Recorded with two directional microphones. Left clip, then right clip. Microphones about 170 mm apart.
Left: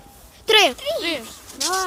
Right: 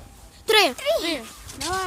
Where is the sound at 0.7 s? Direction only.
45° right (ahead or behind).